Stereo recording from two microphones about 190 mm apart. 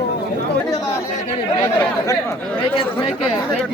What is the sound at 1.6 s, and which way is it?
Speech, 15° left (ahead or behind).